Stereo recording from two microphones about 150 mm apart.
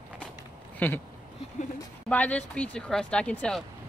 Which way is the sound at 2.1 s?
10° left (ahead or behind).